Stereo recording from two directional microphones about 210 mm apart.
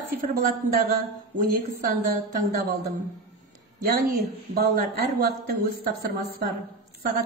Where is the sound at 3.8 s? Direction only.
45° right (ahead or behind).